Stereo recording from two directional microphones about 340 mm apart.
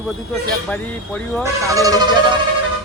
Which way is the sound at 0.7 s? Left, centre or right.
Centre.